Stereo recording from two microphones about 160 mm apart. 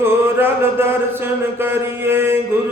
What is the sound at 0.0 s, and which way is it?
Chant, 15° right (ahead or behind).